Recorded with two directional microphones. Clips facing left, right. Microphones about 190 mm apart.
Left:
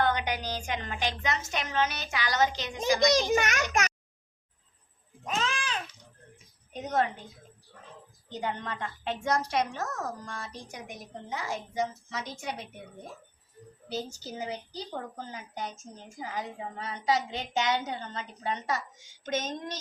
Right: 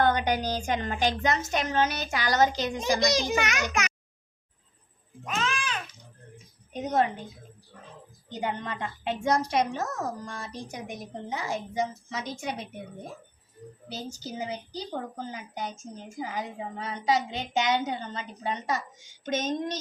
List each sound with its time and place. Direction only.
0.0 s a woman's voice: 45° right (ahead or behind)
3.1 s a child's voice: 45° left (ahead or behind)
5.2 s a sound: 35° left (ahead or behind)
6.7 s a woman's voice: 15° right (ahead or behind)
8.3 s a woman's voice: 15° right (ahead or behind)
13.8 s a woman's voice: 15° right (ahead or behind)
19.2 s a sound: 20° right (ahead or behind)